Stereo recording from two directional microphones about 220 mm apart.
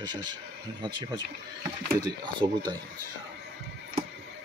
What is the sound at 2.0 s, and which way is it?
Speech, 20° right (ahead or behind).